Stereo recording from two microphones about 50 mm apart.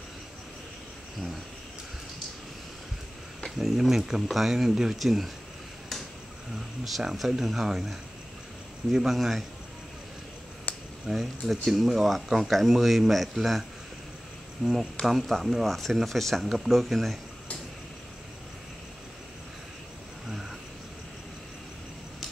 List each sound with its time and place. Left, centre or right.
3.5 s speech: centre
6.8 s speech: centre
10.7 s a sound: left
11.1 s speech: centre
15.0 s speech: centre
20.2 s a sound: centre